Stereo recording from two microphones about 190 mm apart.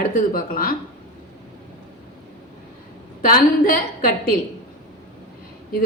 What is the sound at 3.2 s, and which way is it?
Speech, 50° left (ahead or behind).